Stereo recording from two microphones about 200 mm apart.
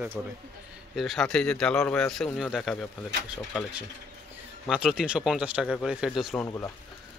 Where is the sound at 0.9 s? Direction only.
Centre (ahead or behind).